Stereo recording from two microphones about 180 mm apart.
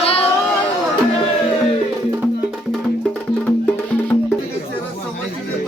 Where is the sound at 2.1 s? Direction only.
10° right (ahead or behind).